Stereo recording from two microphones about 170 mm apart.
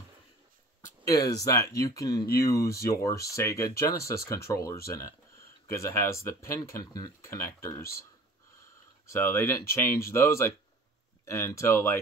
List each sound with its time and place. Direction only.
1.0 s speech: 20° left (ahead or behind)
9.1 s speech: 15° left (ahead or behind)